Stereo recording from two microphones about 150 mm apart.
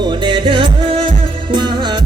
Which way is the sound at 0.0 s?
30° right (ahead or behind).